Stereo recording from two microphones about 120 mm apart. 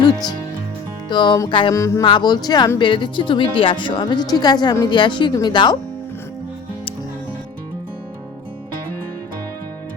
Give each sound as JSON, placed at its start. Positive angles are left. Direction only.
{"t": 0.0, "sound": "a woman's voice", "side_deg": 35}
{"t": 1.5, "sound": "music", "side_deg": 45}
{"t": 1.7, "sound": "speech", "side_deg": 25}
{"t": 2.0, "sound": "a woman's voice", "side_deg": 40}